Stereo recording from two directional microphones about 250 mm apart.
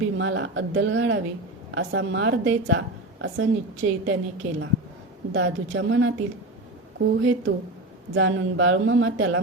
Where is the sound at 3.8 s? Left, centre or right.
Right.